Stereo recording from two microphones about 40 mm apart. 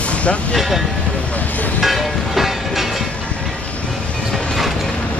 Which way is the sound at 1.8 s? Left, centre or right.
Centre.